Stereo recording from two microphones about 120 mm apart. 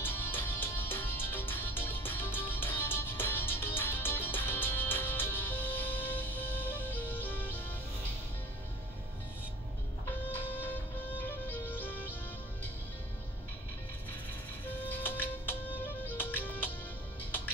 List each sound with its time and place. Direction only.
0.0 s music: 15° left (ahead or behind)
10.5 s music: 15° left (ahead or behind)
14.9 s music: 15° left (ahead or behind)